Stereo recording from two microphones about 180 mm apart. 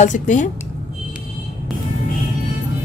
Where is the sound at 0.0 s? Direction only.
45° left (ahead or behind).